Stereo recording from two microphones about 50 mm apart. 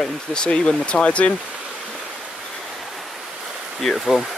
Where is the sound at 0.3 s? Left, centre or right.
Centre.